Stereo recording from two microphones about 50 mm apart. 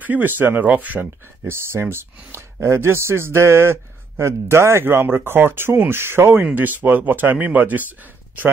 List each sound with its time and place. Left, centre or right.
0.0 s speech: right
1.5 s speech: right
6.5 s speech: right